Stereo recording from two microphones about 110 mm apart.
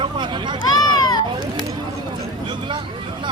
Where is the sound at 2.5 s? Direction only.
45° right (ahead or behind).